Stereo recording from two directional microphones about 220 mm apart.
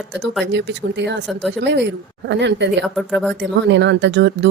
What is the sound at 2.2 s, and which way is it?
Speech, 50° right (ahead or behind).